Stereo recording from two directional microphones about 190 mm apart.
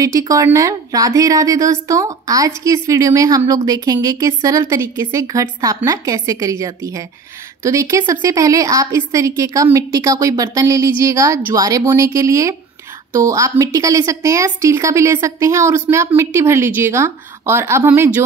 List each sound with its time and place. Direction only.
0.0 s a woman's voice: 15° right (ahead or behind)